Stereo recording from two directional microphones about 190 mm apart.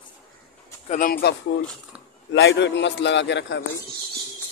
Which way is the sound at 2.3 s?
70° left (ahead or behind).